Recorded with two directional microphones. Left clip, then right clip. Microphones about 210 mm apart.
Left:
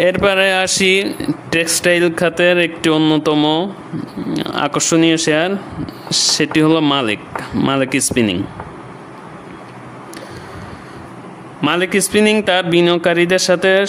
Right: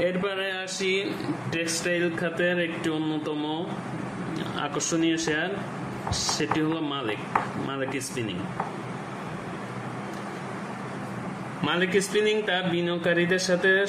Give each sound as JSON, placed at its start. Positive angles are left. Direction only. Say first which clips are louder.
{"t": 0.0, "sound": "speech", "louder": "left 14 dB", "side_deg": 55}
{"t": 11.6, "sound": "speech", "louder": "left 9 dB", "side_deg": 50}